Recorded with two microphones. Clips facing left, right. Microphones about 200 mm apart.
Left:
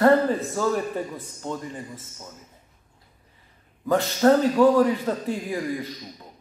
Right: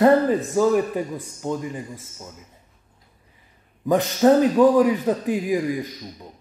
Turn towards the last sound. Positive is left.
turn(degrees=-15)  # may be behind; listen again after turning